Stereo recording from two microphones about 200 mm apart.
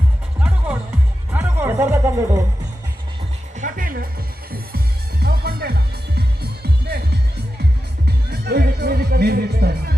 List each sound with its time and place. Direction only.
0.3 s music: 5° right (ahead or behind)
3.6 s music: 45° right (ahead or behind)
5.2 s music: 50° right (ahead or behind)